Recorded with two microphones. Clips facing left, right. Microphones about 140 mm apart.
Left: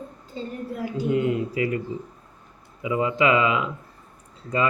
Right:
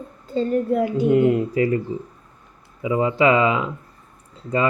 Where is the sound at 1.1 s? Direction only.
50° right (ahead or behind).